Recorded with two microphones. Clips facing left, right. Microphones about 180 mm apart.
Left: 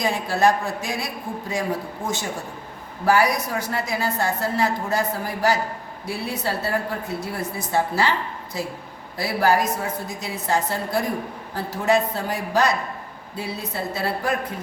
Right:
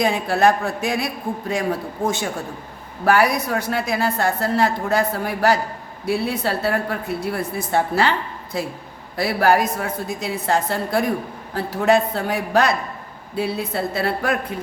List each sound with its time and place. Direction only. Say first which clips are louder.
0.0 s a woman's voice: right 3 dB; 60° right (ahead or behind)
9.1 s a woman's voice: right 3 dB; 60° right (ahead or behind)